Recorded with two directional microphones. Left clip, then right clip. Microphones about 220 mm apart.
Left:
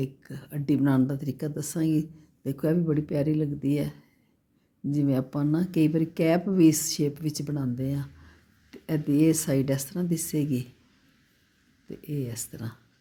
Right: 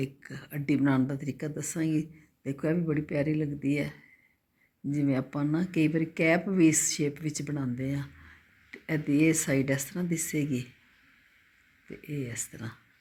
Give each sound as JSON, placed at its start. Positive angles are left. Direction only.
{"t": 0.0, "sound": "speech", "side_deg": 25}
{"t": 11.9, "sound": "speech", "side_deg": 30}